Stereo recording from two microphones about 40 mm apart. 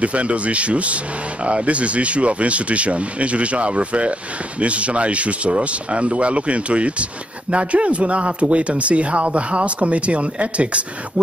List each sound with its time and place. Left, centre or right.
0.0 s a man's voice: right